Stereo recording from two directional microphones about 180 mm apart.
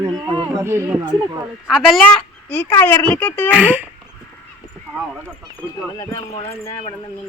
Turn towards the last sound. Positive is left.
turn(degrees=35)  # may be behind; listen again after turning